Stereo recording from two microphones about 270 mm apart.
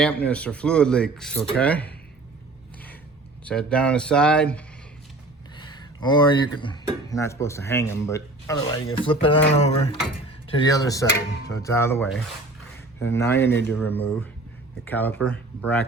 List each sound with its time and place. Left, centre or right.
0.0 s speech: centre
3.4 s speech: centre
5.5 s speech: centre
9.2 s a sound: left
10.6 s speech: centre